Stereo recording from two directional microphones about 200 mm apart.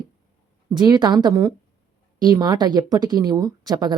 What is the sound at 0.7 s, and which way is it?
A woman's voice, 20° right (ahead or behind).